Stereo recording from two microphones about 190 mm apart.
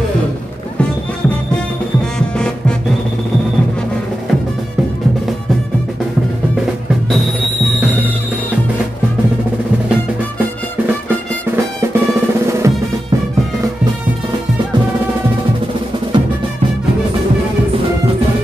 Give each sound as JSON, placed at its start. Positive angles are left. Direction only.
{"t": 2.1, "sound": "music", "side_deg": 5}
{"t": 12.7, "sound": "music", "side_deg": -15}